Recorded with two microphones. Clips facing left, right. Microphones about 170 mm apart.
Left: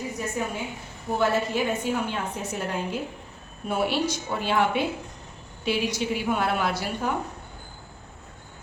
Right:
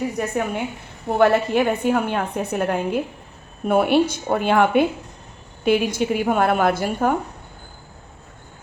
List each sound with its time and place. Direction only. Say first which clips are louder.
0.2 s a woman's voice: right 6 dB; 65° right (ahead or behind)